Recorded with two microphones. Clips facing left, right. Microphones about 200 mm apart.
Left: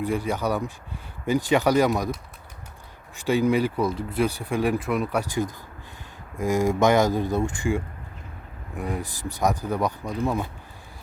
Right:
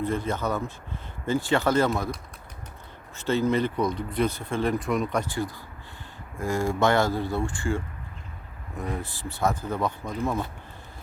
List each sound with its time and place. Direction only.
0.0 s speech: 10° left (ahead or behind)
3.2 s speech: 15° left (ahead or behind)